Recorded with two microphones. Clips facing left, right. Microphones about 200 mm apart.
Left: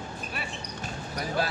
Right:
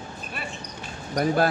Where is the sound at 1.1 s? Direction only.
55° right (ahead or behind).